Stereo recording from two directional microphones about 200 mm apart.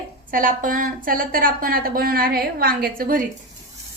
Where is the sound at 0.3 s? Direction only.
45° right (ahead or behind).